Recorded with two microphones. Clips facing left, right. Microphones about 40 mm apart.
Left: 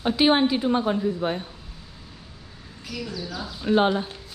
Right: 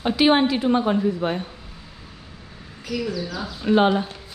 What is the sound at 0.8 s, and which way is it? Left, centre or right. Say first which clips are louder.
Speech: right 3 dB; right.